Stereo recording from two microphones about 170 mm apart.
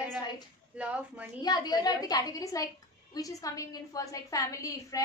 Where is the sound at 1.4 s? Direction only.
25° left (ahead or behind).